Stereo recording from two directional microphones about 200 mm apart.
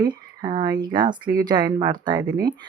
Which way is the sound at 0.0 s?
20° right (ahead or behind).